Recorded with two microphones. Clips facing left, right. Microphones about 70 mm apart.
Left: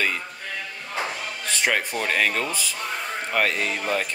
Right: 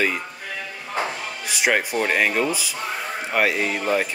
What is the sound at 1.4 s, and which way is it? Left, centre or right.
Speech, centre.